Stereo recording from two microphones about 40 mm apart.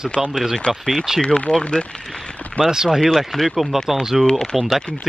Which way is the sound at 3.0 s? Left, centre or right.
Centre.